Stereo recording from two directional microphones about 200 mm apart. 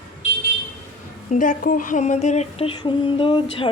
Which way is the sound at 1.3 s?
40° left (ahead or behind).